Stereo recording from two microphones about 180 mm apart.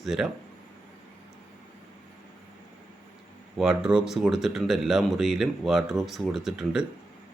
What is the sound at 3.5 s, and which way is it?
Speech, 5° right (ahead or behind).